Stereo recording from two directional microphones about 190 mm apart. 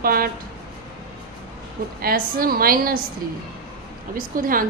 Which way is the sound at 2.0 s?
50° right (ahead or behind).